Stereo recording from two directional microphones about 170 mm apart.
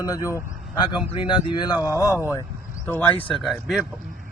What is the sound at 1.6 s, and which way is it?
A man's voice, 25° left (ahead or behind).